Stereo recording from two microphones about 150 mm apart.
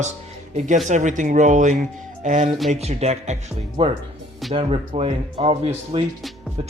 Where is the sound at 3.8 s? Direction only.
35° right (ahead or behind).